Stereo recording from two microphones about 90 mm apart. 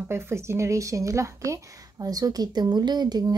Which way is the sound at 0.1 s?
30° right (ahead or behind).